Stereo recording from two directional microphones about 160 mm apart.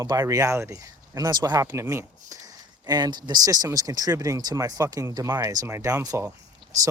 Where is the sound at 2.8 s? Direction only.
25° right (ahead or behind).